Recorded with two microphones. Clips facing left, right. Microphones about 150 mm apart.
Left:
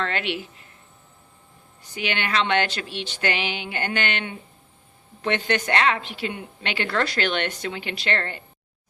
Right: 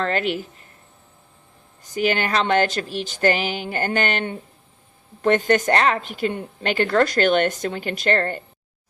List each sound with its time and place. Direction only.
0.0 s a woman's voice: 40° right (ahead or behind)
1.8 s a woman's voice: 45° right (ahead or behind)